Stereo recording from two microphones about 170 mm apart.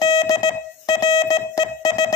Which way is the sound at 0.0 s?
25° left (ahead or behind).